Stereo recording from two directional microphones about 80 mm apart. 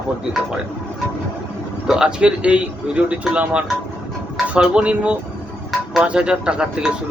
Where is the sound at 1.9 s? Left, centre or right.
Centre.